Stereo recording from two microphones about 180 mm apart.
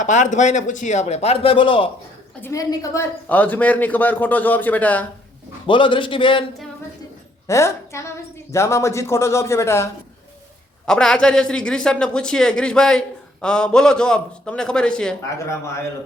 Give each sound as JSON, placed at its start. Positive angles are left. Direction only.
{"t": 0.0, "sound": "speech", "side_deg": 45}
{"t": 2.4, "sound": "speech", "side_deg": 20}
{"t": 5.6, "sound": "speech", "side_deg": 25}
{"t": 7.4, "sound": "a woman's voice", "side_deg": 15}
{"t": 10.8, "sound": "a man's voice", "side_deg": 5}